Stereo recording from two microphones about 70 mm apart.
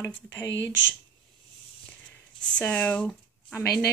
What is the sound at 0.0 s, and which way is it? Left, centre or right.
Speech, left.